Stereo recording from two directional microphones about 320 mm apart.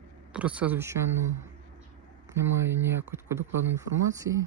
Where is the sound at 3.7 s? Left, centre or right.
Centre.